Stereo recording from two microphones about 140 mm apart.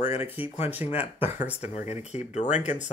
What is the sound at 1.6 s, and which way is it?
Speech, 55° left (ahead or behind).